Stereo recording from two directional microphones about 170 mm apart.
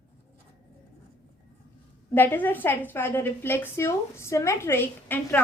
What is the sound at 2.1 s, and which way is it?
A woman's voice, 10° left (ahead or behind).